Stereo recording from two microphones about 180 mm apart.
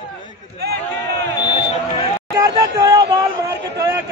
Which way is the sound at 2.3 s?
20° right (ahead or behind).